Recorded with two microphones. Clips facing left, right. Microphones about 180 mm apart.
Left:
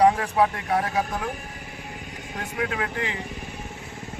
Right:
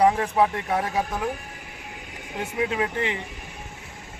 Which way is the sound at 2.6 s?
20° right (ahead or behind).